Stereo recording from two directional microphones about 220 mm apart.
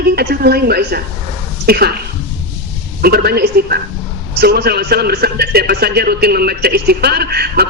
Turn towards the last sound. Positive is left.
turn(degrees=-45)  # may be behind; listen again after turning